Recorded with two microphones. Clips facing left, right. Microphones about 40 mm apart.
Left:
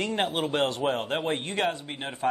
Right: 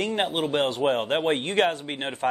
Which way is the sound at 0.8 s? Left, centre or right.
Centre.